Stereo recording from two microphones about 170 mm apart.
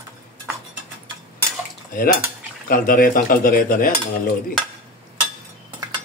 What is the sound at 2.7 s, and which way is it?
Cutlery, 55° left (ahead or behind).